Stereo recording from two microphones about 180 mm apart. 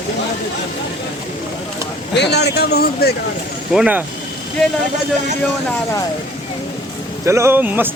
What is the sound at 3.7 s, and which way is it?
Speech, 5° right (ahead or behind).